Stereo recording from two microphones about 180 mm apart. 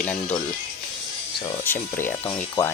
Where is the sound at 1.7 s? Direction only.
10° left (ahead or behind).